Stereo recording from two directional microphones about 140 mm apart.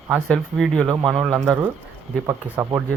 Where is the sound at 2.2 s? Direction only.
20° right (ahead or behind).